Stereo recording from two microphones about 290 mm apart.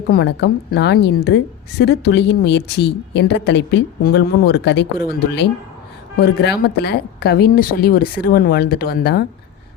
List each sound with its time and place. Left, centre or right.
0.1 s a woman's voice: left
6.1 s a woman's voice: left